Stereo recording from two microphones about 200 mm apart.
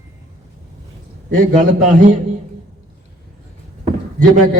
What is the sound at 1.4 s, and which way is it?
Speech, 40° right (ahead or behind).